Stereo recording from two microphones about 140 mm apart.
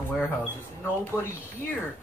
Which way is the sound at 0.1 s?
10° left (ahead or behind).